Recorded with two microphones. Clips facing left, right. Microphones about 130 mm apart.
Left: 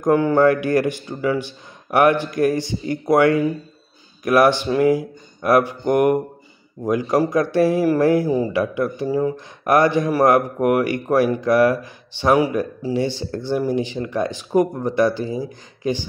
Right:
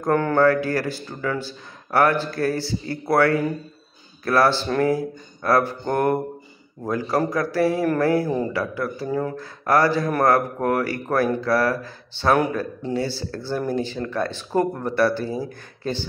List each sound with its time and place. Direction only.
0.0 s speech: 10° left (ahead or behind)